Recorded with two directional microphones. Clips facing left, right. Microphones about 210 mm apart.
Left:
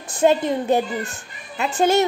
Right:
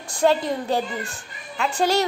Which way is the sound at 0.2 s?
20° left (ahead or behind).